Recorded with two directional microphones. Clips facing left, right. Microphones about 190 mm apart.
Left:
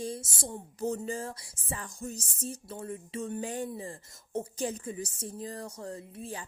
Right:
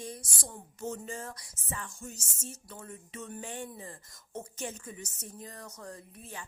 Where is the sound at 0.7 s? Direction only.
35° left (ahead or behind).